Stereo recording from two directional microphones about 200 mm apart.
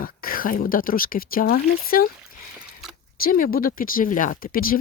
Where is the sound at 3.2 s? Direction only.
45° left (ahead or behind).